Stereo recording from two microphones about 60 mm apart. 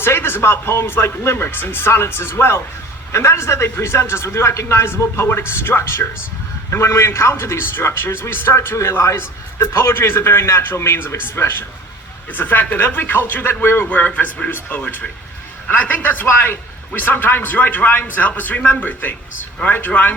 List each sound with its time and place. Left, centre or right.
0.0 s a man's voice: left
12.3 s a man's voice: left